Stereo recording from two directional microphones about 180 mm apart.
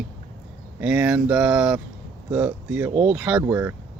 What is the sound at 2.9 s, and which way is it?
Speech, 35° right (ahead or behind).